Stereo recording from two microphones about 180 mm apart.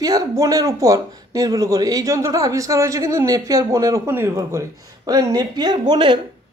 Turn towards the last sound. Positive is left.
turn(degrees=-25)  # may be behind; listen again after turning